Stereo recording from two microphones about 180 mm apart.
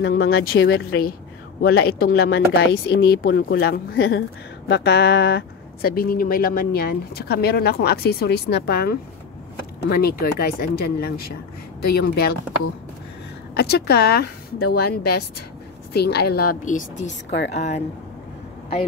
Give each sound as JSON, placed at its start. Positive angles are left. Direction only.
{"t": 0.0, "sound": "speech", "side_deg": 60}
{"t": 4.6, "sound": "speech", "side_deg": 75}
{"t": 13.6, "sound": "speech", "side_deg": 60}